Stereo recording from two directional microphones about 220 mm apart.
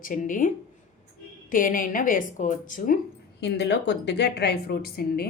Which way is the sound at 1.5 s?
40° left (ahead or behind).